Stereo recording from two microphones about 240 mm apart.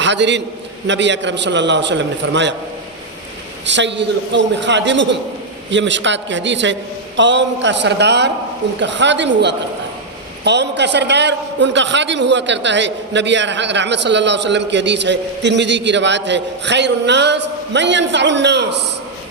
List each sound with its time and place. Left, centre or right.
0.0 s a man's voice: right
3.7 s a man's voice: right